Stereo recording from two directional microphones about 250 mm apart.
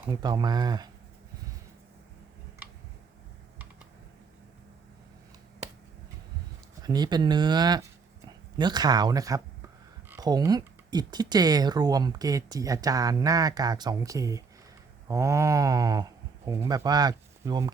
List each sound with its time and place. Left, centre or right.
0.0 s speech: centre
6.8 s speech: centre